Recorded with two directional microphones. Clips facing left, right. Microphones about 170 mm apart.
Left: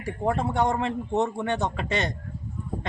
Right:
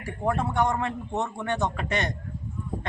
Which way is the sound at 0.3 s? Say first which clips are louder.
Left 1 dB; 25° left (ahead or behind).